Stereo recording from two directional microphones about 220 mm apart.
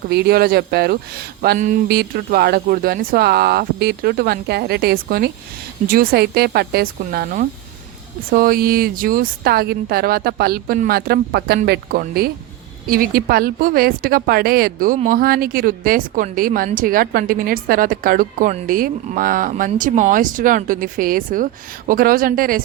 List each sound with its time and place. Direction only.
0.1 s a woman's voice: 45° right (ahead or behind)